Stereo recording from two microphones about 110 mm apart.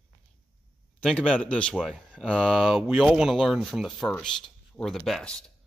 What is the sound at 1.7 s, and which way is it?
Speech, 5° right (ahead or behind).